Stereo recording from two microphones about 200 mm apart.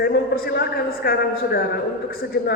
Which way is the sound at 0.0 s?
50° left (ahead or behind).